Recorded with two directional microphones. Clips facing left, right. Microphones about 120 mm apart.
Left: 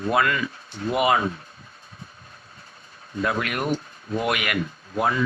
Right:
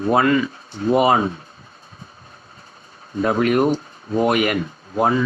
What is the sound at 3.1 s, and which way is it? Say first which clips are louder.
Speech: right 8 dB; 35° right (ahead or behind).